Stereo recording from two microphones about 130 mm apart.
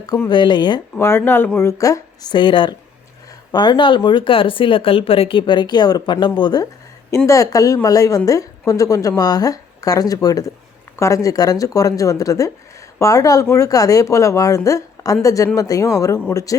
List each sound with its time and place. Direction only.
0.3 s speech: 35° left (ahead or behind)
0.9 s a woman's voice: 20° left (ahead or behind)